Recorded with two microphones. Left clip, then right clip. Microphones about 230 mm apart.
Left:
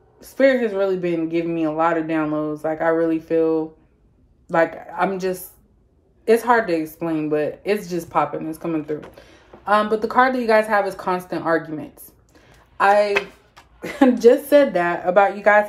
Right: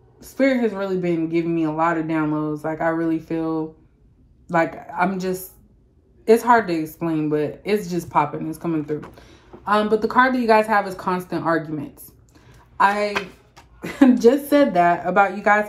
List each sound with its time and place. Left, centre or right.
0.2 s a woman's voice: right
13.1 s a woman's voice: centre